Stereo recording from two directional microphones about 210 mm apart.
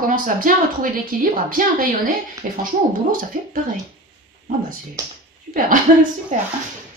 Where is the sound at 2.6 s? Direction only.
40° right (ahead or behind).